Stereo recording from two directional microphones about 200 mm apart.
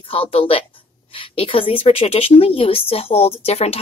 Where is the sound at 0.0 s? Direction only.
25° left (ahead or behind).